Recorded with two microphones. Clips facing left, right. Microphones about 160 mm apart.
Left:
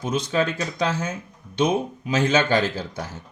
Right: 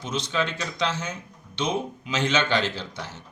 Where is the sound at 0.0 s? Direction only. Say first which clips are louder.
Left 5 dB; 45° left (ahead or behind).